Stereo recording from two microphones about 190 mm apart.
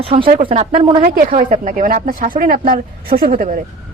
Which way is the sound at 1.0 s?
45° right (ahead or behind).